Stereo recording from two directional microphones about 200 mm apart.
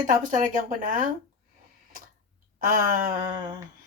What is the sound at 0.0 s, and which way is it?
Speech, 40° right (ahead or behind).